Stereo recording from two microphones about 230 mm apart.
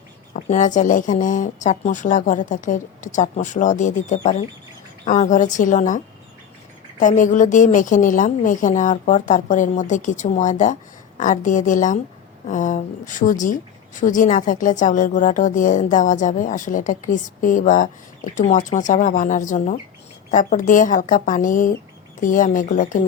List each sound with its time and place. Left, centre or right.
0.3 s a woman's voice: left
7.0 s a woman's voice: left